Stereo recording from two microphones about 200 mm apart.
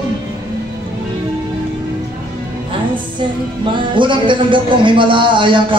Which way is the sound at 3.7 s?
25° right (ahead or behind).